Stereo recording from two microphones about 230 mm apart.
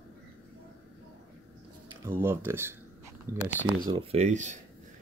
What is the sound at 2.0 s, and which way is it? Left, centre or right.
Speech, centre.